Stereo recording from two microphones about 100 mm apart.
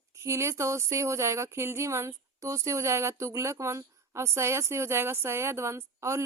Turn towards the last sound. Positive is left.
turn(degrees=-30)  # may be behind; listen again after turning